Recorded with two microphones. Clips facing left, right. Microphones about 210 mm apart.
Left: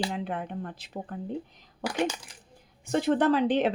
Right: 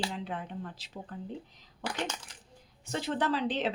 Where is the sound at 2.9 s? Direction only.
55° left (ahead or behind).